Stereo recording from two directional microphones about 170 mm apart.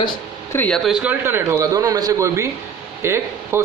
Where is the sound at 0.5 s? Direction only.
5° left (ahead or behind).